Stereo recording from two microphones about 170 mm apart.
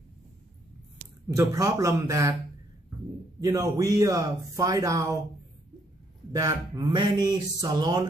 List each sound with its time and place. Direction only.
1.3 s speech: 15° right (ahead or behind)
3.3 s speech: 20° right (ahead or behind)
6.3 s speech: 20° right (ahead or behind)